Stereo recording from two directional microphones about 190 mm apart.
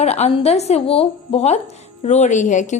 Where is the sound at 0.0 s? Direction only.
35° left (ahead or behind).